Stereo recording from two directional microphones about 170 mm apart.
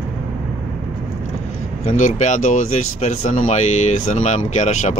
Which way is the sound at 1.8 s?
50° left (ahead or behind).